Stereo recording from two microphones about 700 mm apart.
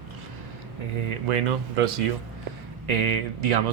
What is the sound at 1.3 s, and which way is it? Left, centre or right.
Speech, right.